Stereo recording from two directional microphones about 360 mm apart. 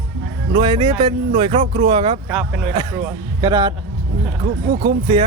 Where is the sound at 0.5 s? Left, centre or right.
Centre.